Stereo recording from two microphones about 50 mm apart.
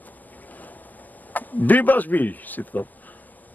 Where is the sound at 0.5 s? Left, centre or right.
Left.